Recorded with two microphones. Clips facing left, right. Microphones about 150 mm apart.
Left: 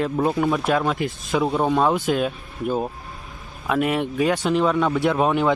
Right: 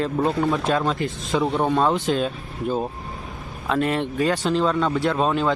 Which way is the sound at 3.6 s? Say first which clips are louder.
Left 1 dB; 10° left (ahead or behind).